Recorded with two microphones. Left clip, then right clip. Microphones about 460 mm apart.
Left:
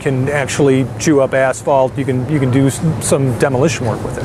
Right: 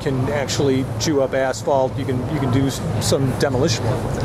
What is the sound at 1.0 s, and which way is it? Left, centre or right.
Speech, left.